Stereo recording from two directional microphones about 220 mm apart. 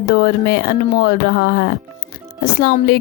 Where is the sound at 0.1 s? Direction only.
45° left (ahead or behind).